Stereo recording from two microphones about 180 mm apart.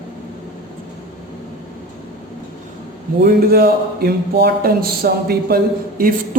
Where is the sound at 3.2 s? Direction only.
60° right (ahead or behind).